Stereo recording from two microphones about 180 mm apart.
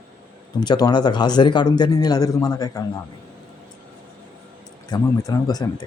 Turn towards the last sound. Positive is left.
turn(degrees=20)  # may be behind; listen again after turning